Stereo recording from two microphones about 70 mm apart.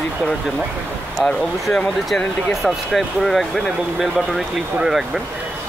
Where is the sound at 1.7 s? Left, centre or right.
Centre.